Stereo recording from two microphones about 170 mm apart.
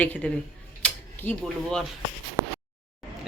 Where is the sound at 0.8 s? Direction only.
10° left (ahead or behind).